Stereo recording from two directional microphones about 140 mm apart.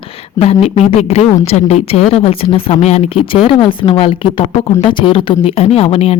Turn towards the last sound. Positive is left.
turn(degrees=45)  # may be behind; listen again after turning